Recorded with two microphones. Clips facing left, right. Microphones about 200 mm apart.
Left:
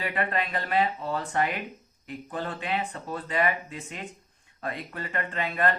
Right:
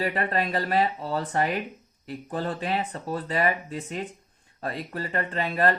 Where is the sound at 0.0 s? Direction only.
40° right (ahead or behind).